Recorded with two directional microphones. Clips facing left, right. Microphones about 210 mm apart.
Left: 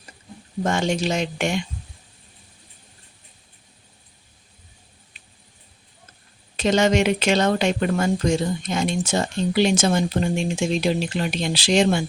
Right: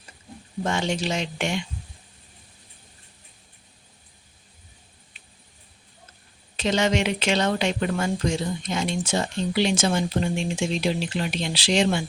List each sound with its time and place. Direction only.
0.6 s speech: 45° left (ahead or behind)
6.6 s speech: 45° left (ahead or behind)